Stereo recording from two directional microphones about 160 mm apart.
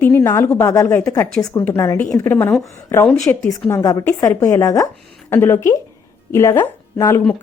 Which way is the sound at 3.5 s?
20° left (ahead or behind).